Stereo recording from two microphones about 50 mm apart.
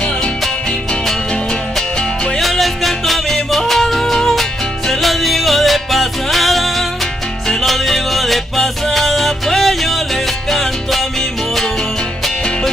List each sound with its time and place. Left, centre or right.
2.4 s music: centre